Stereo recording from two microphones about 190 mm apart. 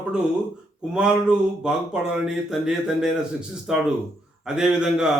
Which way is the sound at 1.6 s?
5° right (ahead or behind).